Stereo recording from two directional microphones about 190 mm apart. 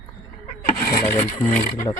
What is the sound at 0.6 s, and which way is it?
Rub, 50° left (ahead or behind).